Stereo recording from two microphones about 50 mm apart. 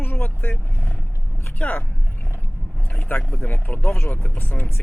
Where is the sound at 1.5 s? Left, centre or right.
Left.